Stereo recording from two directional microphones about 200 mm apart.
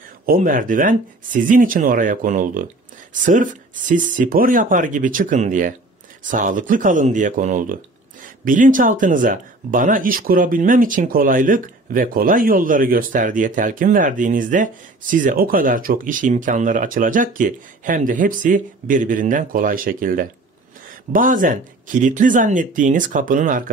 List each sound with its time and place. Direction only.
0.3 s speech: 45° right (ahead or behind)